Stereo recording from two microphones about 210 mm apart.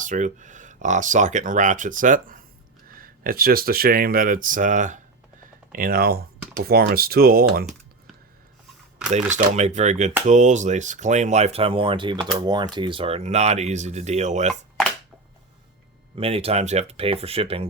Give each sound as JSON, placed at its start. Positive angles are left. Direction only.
{"t": 0.0, "sound": "speech", "side_deg": -35}
{"t": 9.3, "sound": "speech", "side_deg": -35}
{"t": 16.1, "sound": "speech", "side_deg": -25}